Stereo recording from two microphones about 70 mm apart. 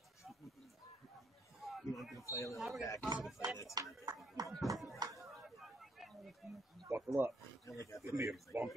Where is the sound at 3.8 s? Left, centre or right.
Right.